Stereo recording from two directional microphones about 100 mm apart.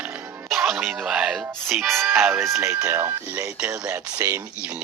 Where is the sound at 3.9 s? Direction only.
25° right (ahead or behind).